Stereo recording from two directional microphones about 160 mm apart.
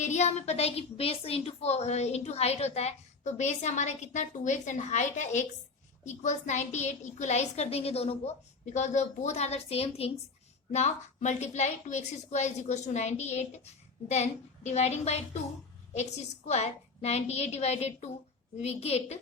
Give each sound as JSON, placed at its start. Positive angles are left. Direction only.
{"t": 0.0, "sound": "a woman's voice", "side_deg": 45}